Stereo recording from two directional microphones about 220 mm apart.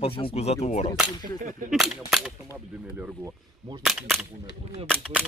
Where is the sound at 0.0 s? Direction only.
25° left (ahead or behind).